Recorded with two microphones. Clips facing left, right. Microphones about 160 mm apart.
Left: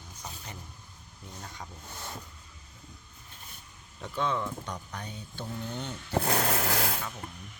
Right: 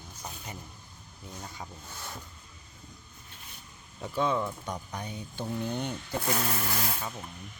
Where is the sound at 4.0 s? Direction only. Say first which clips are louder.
Right 2 dB; 10° right (ahead or behind).